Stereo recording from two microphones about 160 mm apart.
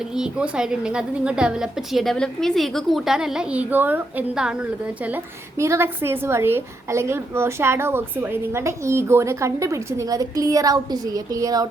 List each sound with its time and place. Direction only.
0.2 s a woman's voice: 5° right (ahead or behind); by 11.7 s 20° right (ahead or behind)